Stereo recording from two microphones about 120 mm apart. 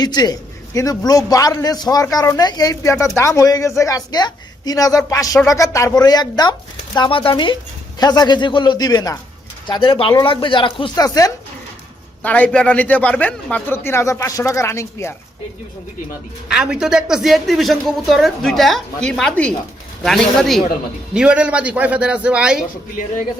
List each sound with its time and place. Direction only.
0.0 s a man's voice: 35° left (ahead or behind)
7.9 s a man's voice: 35° left (ahead or behind)
10.9 s a man's voice: 30° left (ahead or behind)
12.2 s a man's voice: 10° left (ahead or behind)
16.5 s speech: 5° right (ahead or behind)